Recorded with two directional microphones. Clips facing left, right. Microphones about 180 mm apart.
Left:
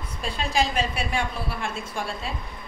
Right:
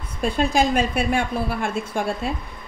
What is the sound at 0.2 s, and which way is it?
A woman's voice, 50° right (ahead or behind).